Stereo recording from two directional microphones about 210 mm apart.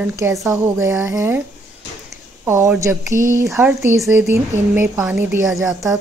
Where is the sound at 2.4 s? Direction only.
15° right (ahead or behind).